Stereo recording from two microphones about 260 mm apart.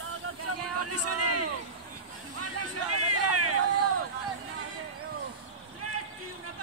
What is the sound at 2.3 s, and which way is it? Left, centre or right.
Hubbub, right.